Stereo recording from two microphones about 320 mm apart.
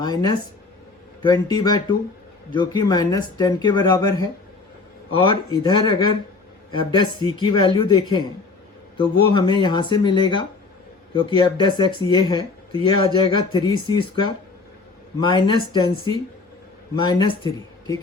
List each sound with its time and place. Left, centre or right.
0.0 s speech: centre